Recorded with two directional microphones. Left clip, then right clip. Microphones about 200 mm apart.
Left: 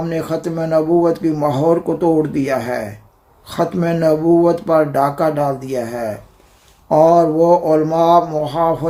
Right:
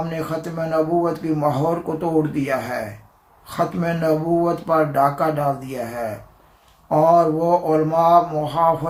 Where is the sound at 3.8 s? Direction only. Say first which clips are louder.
Left 7 dB; 50° left (ahead or behind).